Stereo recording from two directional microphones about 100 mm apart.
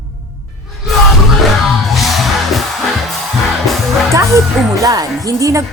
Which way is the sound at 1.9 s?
Centre (ahead or behind).